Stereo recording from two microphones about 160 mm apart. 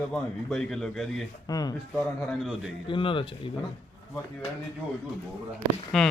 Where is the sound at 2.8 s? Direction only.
30° left (ahead or behind).